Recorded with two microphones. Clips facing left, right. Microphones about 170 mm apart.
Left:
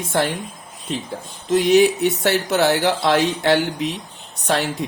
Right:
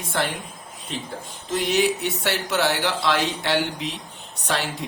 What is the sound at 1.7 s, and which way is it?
Speech, 45° left (ahead or behind).